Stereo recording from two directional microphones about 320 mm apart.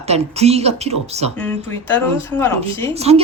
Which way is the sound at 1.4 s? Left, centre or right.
Centre.